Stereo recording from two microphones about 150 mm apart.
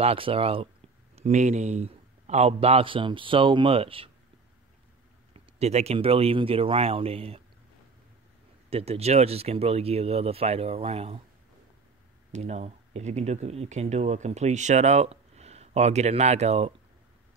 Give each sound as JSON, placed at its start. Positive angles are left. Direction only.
{"t": 0.0, "sound": "speech", "side_deg": -40}
{"t": 1.1, "sound": "speech", "side_deg": -50}
{"t": 5.3, "sound": "speech", "side_deg": -45}
{"t": 8.6, "sound": "speech", "side_deg": -40}
{"t": 12.3, "sound": "speech", "side_deg": -50}